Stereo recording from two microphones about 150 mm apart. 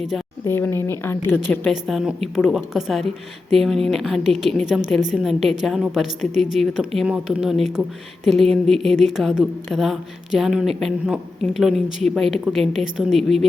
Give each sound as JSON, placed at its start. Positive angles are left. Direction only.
{"t": 0.4, "sound": "a woman's voice", "side_deg": 15}
{"t": 1.7, "sound": "a woman's voice", "side_deg": 0}